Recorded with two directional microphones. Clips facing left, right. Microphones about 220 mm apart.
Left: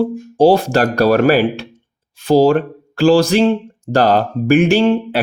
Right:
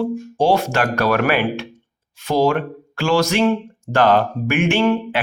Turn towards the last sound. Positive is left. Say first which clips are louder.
# left 4 dB
turn(degrees=30)  # may be behind; listen again after turning